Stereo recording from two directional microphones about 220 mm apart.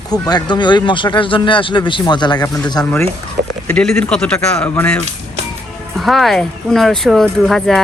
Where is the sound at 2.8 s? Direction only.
5° left (ahead or behind).